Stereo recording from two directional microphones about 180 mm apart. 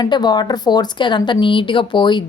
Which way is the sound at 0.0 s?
25° left (ahead or behind).